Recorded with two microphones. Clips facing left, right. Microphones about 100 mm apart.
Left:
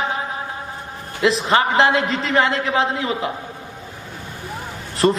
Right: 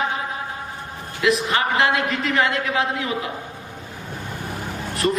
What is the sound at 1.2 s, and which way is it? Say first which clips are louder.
A man's voice: left 3 dB; 30° left (ahead or behind).